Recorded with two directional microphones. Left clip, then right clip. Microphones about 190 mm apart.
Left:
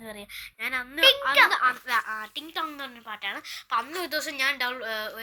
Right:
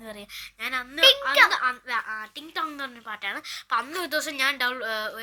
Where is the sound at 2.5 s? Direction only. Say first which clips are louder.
Right 3 dB; 10° right (ahead or behind).